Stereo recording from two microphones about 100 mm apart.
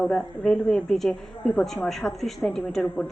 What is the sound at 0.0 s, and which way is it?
A woman's voice, 10° left (ahead or behind).